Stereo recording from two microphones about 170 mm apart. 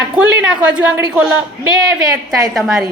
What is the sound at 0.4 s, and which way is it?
Speech, 5° right (ahead or behind).